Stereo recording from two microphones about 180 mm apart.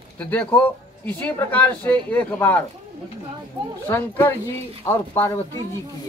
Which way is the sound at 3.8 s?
10° left (ahead or behind).